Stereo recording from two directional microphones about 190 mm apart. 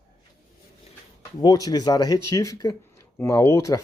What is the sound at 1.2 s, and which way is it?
Speech, 20° left (ahead or behind).